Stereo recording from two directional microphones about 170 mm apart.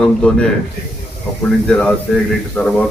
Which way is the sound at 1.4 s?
5° left (ahead or behind).